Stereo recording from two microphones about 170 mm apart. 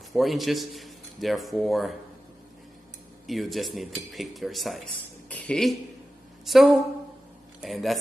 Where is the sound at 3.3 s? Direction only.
Centre (ahead or behind).